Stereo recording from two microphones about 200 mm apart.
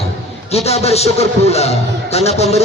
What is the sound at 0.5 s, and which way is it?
Speech, 30° left (ahead or behind).